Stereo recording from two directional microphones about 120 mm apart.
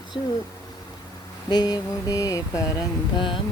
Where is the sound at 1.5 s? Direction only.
35° left (ahead or behind).